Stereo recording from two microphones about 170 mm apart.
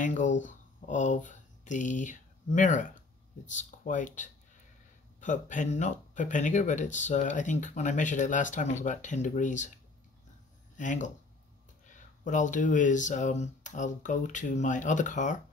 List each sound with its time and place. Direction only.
0.0 s speech: 50° left (ahead or behind)
10.8 s speech: 45° left (ahead or behind)